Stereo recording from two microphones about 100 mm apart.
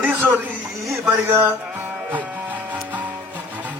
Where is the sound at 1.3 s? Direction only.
20° right (ahead or behind).